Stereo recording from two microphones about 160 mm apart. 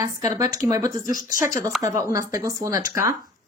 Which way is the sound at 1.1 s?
60° left (ahead or behind).